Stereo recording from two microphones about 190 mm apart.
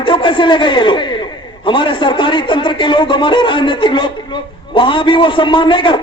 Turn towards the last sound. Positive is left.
turn(degrees=25)  # may be behind; listen again after turning